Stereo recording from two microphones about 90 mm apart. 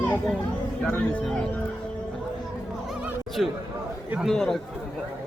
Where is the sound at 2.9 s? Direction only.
5° right (ahead or behind).